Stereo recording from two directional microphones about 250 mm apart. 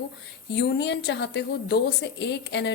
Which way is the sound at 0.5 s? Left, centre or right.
Left.